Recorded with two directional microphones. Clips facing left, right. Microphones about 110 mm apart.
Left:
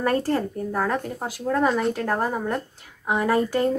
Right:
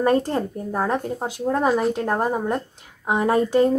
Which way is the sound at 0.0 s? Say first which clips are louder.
Right 3 dB; 20° right (ahead or behind).